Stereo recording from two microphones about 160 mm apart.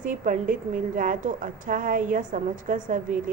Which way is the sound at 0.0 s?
55° right (ahead or behind).